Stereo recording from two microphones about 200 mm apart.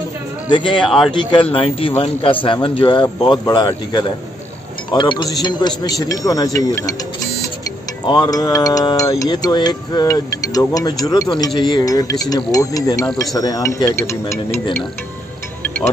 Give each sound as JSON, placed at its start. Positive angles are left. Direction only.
{"t": 0.5, "sound": "speech", "side_deg": 25}
{"t": 0.8, "sound": "speech", "side_deg": 0}
{"t": 1.1, "sound": "speech", "side_deg": 25}
{"t": 8.1, "sound": "speech", "side_deg": 20}